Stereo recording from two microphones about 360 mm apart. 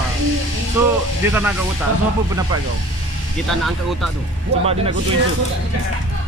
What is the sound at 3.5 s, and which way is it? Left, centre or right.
Speech, centre.